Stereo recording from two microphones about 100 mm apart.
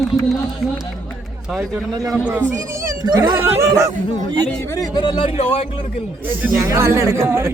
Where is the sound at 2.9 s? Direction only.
45° right (ahead or behind).